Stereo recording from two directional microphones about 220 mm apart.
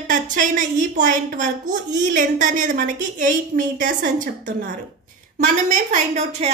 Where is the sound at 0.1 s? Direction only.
35° right (ahead or behind).